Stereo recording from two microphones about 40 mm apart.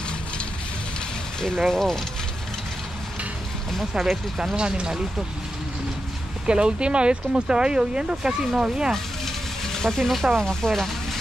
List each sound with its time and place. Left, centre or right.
1.7 s speech: centre
3.9 s speech: centre
4.6 s speech: right
6.4 s speech: right
9.8 s speech: centre